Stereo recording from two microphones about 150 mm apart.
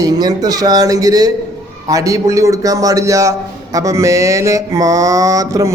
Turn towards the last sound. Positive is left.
turn(degrees=-25)  # may be behind; listen again after turning